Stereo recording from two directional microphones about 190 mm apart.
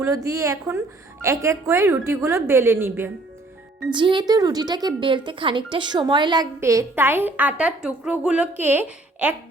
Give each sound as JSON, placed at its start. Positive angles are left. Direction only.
{"t": 0.0, "sound": "a woman's voice", "side_deg": -15}
{"t": 3.8, "sound": "speech", "side_deg": -25}